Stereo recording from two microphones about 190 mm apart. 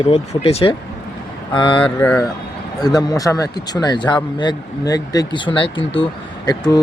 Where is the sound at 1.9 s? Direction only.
5° left (ahead or behind).